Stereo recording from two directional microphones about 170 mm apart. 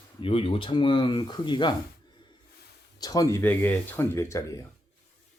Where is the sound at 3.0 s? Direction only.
20° left (ahead or behind).